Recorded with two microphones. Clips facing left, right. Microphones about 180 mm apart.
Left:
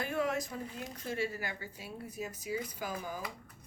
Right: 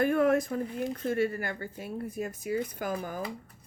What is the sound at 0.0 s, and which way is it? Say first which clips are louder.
Speech: right 9 dB; 55° right (ahead or behind).